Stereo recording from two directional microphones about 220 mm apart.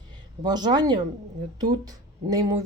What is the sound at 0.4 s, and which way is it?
Speech, 20° right (ahead or behind).